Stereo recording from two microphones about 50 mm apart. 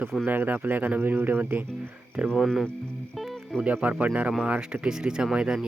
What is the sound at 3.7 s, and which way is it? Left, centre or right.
Speech, right.